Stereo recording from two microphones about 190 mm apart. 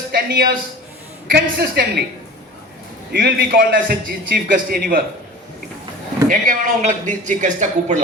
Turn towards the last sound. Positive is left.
turn(degrees=-40)  # may be behind; listen again after turning